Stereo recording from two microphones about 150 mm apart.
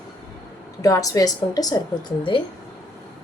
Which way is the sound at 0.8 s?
20° left (ahead or behind).